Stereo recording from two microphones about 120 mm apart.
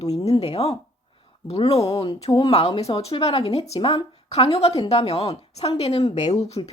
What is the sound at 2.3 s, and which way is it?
Speech, 45° left (ahead or behind).